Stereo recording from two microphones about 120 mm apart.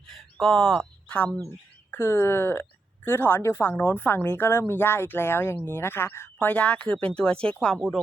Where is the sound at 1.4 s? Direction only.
20° left (ahead or behind).